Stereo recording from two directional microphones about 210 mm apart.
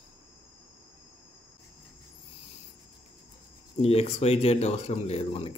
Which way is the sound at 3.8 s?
30° left (ahead or behind).